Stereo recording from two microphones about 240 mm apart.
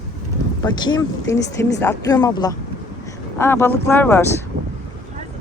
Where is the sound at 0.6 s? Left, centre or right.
Centre.